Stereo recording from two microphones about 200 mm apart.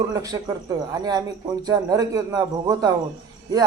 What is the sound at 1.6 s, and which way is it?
Speech, 20° right (ahead or behind).